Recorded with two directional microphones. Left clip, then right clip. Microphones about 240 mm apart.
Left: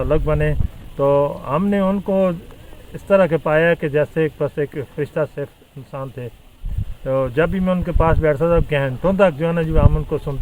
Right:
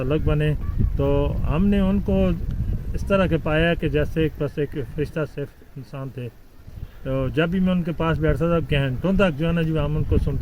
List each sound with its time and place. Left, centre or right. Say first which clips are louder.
0.0 s speech: left 5 dB; centre